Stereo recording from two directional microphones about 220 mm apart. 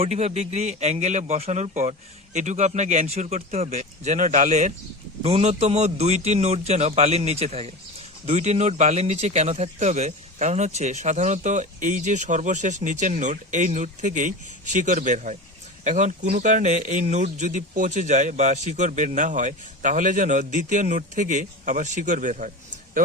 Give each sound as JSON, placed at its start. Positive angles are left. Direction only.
{"t": 0.0, "sound": "a man's voice", "side_deg": -30}